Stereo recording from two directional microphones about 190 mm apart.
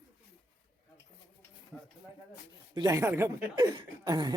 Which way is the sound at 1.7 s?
Centre (ahead or behind).